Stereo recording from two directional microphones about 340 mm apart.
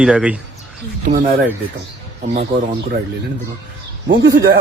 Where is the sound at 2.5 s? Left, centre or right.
Centre.